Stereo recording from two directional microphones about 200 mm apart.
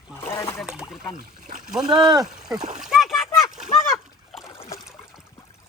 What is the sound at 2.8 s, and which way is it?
Speech, centre (ahead or behind).